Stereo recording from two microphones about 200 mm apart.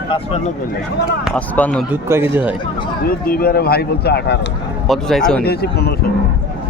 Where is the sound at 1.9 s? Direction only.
10° right (ahead or behind).